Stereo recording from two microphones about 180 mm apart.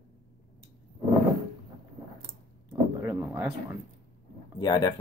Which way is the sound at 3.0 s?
10° right (ahead or behind).